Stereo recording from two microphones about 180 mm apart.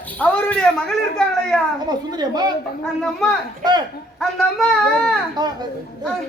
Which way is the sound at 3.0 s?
5° left (ahead or behind).